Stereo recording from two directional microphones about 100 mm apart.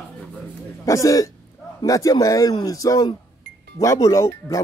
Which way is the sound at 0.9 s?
35° left (ahead or behind).